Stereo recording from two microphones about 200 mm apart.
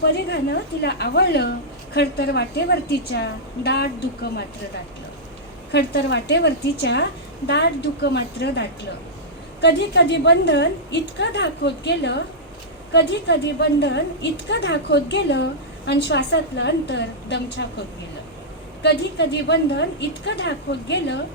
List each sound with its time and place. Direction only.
0.1 s a woman's voice: 55° left (ahead or behind)
5.7 s a woman's voice: 55° left (ahead or behind)
18.8 s a woman's voice: 55° left (ahead or behind)